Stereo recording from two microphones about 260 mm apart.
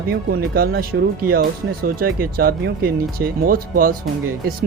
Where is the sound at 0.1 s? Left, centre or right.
Right.